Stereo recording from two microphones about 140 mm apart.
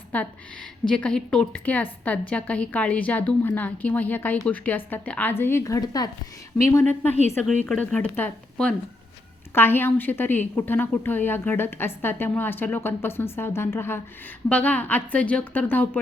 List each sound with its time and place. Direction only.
0.1 s a woman's voice: 10° left (ahead or behind); by 6.1 s 25° left (ahead or behind)
6.7 s a woman's voice: 15° left (ahead or behind)